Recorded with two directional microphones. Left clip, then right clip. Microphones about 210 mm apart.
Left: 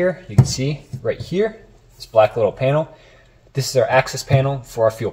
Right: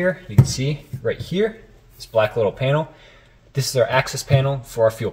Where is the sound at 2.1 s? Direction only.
15° right (ahead or behind).